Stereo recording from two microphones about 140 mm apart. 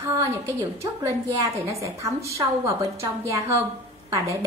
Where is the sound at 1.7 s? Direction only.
20° right (ahead or behind).